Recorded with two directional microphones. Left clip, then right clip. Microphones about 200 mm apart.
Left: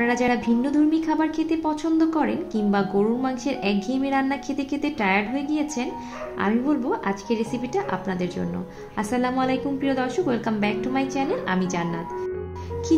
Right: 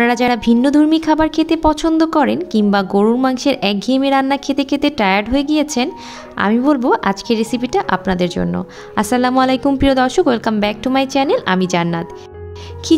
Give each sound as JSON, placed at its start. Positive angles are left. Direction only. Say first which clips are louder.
{"t": 0.0, "sound": "a woman's voice", "louder": "right 8 dB", "side_deg": -45}